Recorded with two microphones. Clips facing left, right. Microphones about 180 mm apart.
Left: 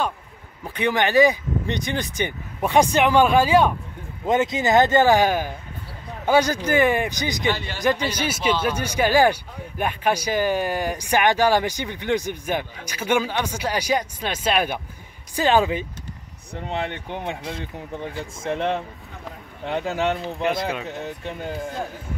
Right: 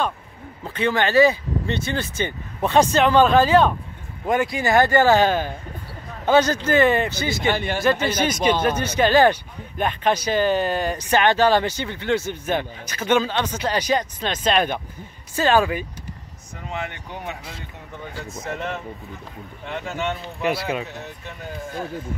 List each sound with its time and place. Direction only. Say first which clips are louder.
0.7 s speech: even; 15° left (ahead or behind)
4.3 s speech: left 1 dB; 20° left (ahead or behind)
7.5 s a man's voice: right 7 dB; 55° right (ahead or behind)
8.1 s speech: right 3 dB; 10° left (ahead or behind)
16.5 s speech: left 3 dB; 30° left (ahead or behind)
20.4 s speech: right 1 dB; 5° right (ahead or behind)